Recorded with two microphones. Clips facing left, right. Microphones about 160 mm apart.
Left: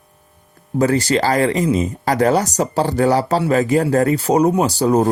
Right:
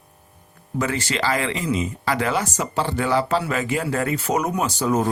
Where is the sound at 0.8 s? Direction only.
40° left (ahead or behind).